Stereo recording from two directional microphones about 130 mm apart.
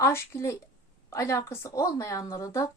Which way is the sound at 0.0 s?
20° left (ahead or behind).